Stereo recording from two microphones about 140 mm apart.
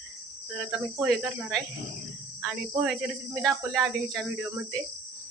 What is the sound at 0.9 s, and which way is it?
Speech, 5° right (ahead or behind).